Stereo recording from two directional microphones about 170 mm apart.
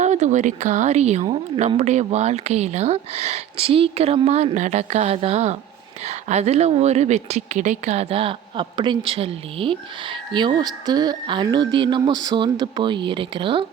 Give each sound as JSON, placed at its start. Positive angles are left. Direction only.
{"t": 0.0, "sound": "speech", "side_deg": -45}